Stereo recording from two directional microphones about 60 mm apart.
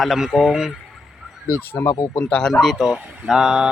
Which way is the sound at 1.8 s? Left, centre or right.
Left.